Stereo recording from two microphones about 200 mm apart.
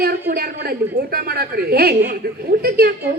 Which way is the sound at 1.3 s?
50° right (ahead or behind).